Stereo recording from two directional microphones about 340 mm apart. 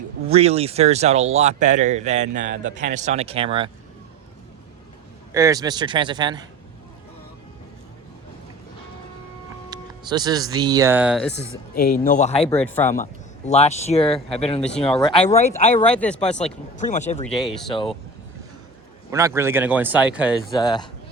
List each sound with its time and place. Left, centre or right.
0.3 s speech: centre
5.3 s a man's voice: centre
9.6 s speech: centre
11.7 s speech: left
12.5 s speech: centre
13.0 s speech: centre
14.8 s speech: centre
15.2 s speech: centre
15.8 s speech: centre
16.3 s speech: centre
17.2 s speech: centre
19.1 s speech: centre
20.5 s speech: centre